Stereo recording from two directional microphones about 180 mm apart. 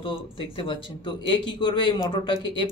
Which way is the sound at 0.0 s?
30° left (ahead or behind).